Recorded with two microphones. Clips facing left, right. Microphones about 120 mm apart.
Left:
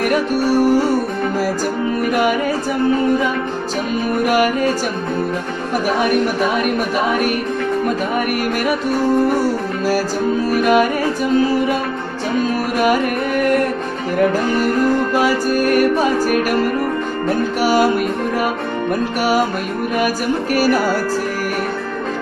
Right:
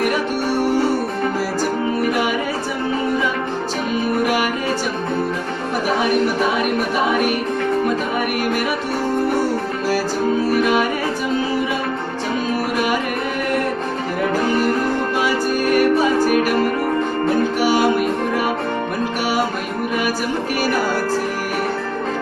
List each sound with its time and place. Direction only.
10.6 s music: 50° left (ahead or behind)
17.6 s music: 45° left (ahead or behind)